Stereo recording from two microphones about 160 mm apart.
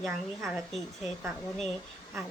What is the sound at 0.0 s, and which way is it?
Speech, centre (ahead or behind).